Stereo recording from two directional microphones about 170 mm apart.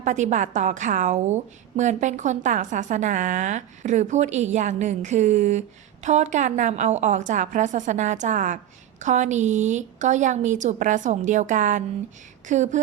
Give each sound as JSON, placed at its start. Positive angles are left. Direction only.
{"t": 0.0, "sound": "a woman's voice", "side_deg": -45}